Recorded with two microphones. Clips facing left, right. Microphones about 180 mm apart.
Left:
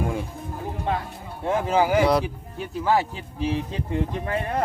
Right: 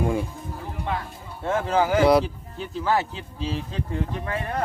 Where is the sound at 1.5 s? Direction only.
10° left (ahead or behind).